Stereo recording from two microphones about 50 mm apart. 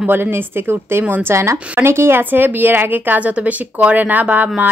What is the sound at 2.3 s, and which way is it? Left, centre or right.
Speech, right.